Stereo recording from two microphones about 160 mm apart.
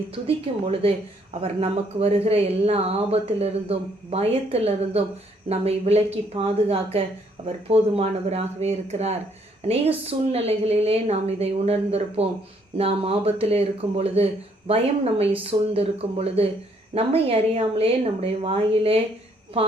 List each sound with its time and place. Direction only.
0.1 s speech: 35° right (ahead or behind)